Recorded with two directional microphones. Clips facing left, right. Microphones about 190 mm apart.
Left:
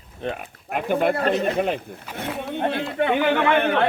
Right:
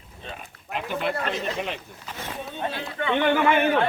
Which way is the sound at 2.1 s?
60° left (ahead or behind).